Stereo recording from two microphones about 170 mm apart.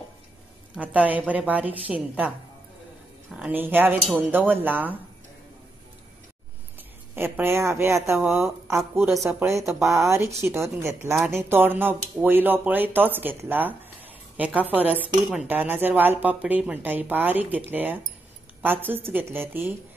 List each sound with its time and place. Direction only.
0.7 s speech: 10° right (ahead or behind)
7.2 s speech: 10° right (ahead or behind)
9.1 s speech: centre (ahead or behind)
9.4 s speech: 15° right (ahead or behind)